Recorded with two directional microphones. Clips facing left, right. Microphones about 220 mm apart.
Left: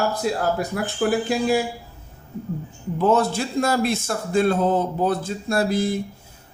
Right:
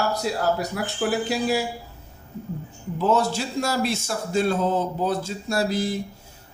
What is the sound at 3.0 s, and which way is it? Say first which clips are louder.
Speech: left 3 dB; 55° left (ahead or behind).